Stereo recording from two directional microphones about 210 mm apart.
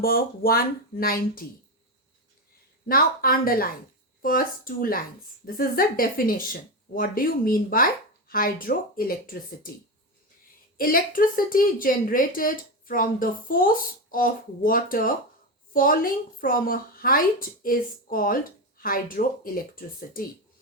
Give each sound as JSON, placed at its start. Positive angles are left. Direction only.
{"t": 0.0, "sound": "speech", "side_deg": 45}
{"t": 2.8, "sound": "speech", "side_deg": 45}
{"t": 10.8, "sound": "speech", "side_deg": 45}